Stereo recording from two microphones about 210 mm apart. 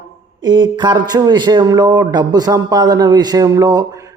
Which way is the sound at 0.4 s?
20° right (ahead or behind).